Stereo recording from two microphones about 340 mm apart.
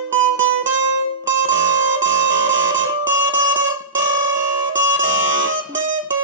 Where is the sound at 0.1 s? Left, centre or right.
Right.